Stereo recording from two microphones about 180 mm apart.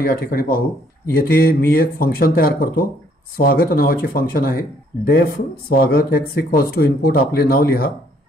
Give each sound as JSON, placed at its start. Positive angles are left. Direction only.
{"t": 0.0, "sound": "speech", "side_deg": 55}